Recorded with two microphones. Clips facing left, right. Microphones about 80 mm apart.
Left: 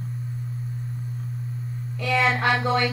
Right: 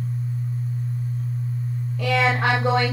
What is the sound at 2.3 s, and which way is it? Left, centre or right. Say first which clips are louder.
Speech: right 1 dB; centre.